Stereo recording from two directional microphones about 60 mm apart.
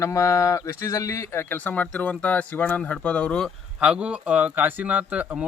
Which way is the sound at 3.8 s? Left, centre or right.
Centre.